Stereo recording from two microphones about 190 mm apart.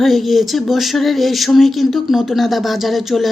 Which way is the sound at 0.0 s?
Centre (ahead or behind).